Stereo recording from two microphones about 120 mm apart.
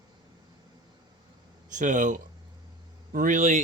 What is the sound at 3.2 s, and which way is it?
Speech, 90° right.